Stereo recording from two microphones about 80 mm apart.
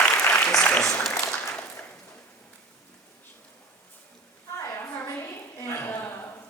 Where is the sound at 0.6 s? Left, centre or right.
Centre.